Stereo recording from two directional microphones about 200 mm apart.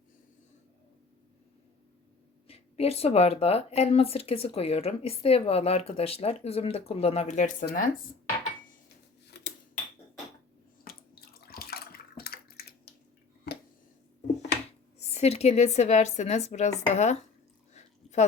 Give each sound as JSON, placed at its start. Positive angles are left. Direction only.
{"t": 2.5, "sound": "speech", "side_deg": 30}
{"t": 7.6, "sound": "speech", "side_deg": 50}
{"t": 11.1, "sound": "bathtub", "side_deg": 50}
{"t": 13.5, "sound": "a sound", "side_deg": 55}
{"t": 14.9, "sound": "speech", "side_deg": 35}
{"t": 17.7, "sound": "a sound", "side_deg": 35}